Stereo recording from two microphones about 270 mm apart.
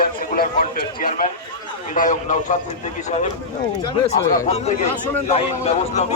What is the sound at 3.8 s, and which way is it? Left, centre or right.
Speech, left.